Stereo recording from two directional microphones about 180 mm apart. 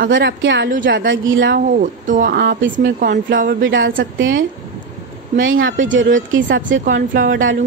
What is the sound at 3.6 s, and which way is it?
Speech, 90° right.